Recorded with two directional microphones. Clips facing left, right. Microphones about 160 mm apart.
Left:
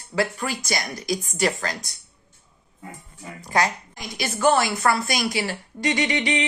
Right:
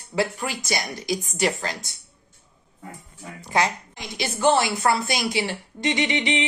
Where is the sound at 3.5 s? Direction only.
25° right (ahead or behind).